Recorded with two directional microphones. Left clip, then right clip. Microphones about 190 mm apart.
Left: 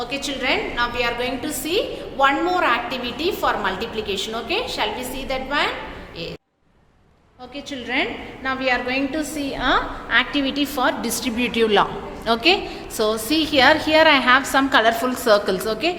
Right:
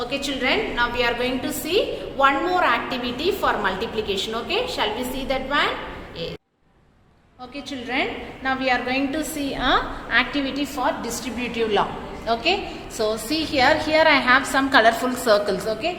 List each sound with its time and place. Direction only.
0.0 s a woman's voice: 5° left (ahead or behind)
7.7 s a woman's voice: 5° left (ahead or behind)
10.2 s a woman's voice: 15° left (ahead or behind)
15.6 s a woman's voice: 30° left (ahead or behind)